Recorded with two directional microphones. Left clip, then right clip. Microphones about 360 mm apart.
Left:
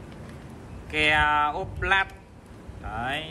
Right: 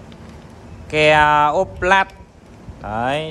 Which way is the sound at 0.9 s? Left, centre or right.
Centre.